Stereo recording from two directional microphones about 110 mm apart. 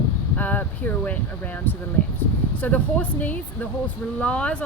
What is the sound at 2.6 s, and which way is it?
Speech, 15° left (ahead or behind).